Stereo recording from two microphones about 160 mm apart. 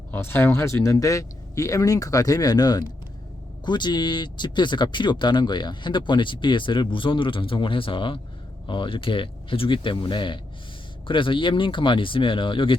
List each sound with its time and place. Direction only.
0.1 s speech: 15° left (ahead or behind); by 12.7 s 30° left (ahead or behind)